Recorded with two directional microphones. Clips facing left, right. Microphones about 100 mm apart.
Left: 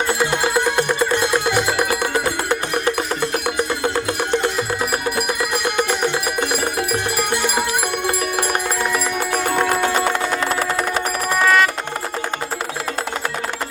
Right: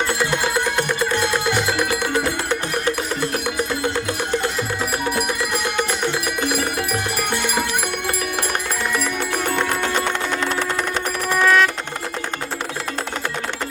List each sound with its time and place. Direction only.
9.6 s music: 10° left (ahead or behind)